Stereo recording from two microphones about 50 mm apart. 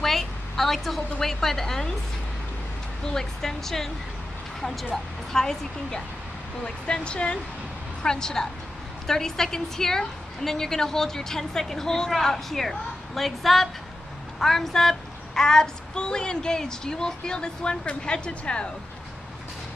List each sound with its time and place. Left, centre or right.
0.0 s a sound: centre
1.2 s a woman's voice: centre
3.1 s a woman's voice: centre
4.9 s a woman's voice: centre